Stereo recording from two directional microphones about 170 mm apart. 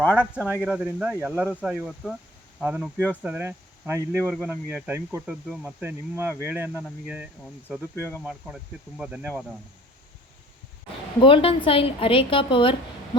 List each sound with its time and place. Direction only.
0.2 s speech: 10° right (ahead or behind)
11.2 s a woman's voice: 30° left (ahead or behind)